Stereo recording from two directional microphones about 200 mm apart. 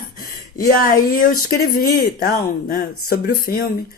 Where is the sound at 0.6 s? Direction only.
45° left (ahead or behind).